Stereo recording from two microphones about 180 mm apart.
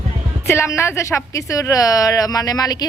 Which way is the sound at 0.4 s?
15° left (ahead or behind).